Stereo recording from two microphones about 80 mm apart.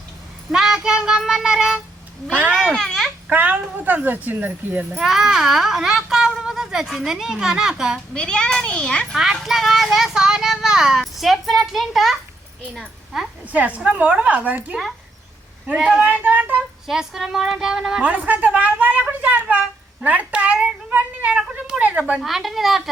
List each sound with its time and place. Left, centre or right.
0.5 s child singing: centre
2.5 s a child's voice: centre
3.2 s speech: right
4.9 s speech: centre
8.1 s a child's voice: centre
9.1 s a woman's voice: centre
13.5 s child singing: centre
15.8 s child singing: centre
16.2 s speech: right
16.8 s speech: centre
18.0 s a woman's voice: centre
22.2 s speech: centre